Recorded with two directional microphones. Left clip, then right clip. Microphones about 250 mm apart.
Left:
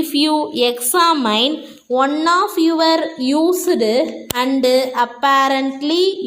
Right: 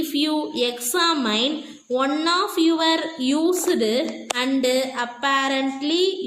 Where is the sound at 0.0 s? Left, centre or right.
Centre.